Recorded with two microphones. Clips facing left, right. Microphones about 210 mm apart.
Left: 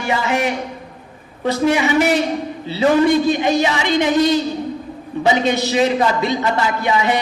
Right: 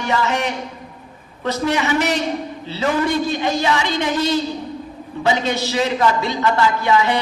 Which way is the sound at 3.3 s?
15° left (ahead or behind).